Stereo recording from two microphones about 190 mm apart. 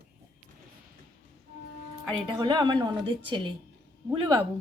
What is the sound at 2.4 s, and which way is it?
A woman's voice, 20° right (ahead or behind).